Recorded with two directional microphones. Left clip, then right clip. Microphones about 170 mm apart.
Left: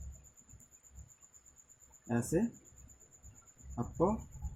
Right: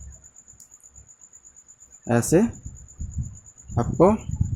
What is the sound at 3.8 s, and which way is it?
Speech, 50° right (ahead or behind).